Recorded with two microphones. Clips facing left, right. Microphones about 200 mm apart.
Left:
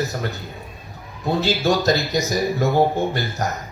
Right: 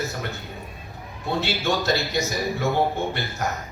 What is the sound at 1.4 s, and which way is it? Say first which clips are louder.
Speech: left 5 dB; 40° left (ahead or behind).